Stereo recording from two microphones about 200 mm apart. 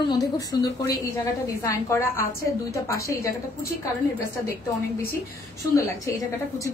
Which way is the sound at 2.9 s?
15° left (ahead or behind).